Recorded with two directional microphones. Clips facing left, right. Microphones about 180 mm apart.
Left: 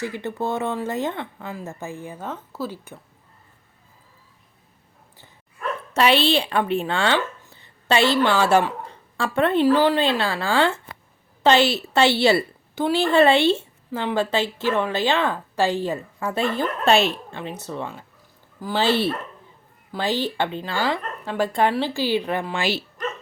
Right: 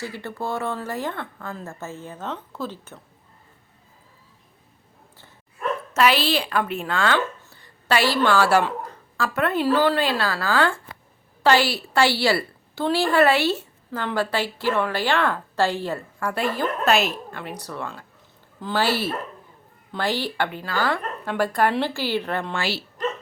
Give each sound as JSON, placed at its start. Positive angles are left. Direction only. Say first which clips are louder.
{"t": 0.0, "sound": "speech", "louder": "left 4 dB", "side_deg": 20}
{"t": 5.9, "sound": "a woman's voice", "louder": "left 2 dB", "side_deg": 30}
{"t": 18.9, "sound": "speech", "louder": "left 4 dB", "side_deg": -5}
{"t": 20.0, "sound": "a woman's voice", "louder": "left 1 dB", "side_deg": 15}